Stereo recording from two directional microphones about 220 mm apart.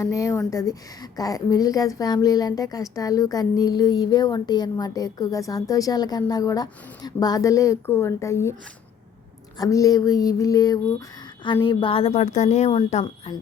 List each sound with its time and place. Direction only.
0.0 s a woman's voice: 15° left (ahead or behind)
9.6 s a woman's voice: 15° left (ahead or behind)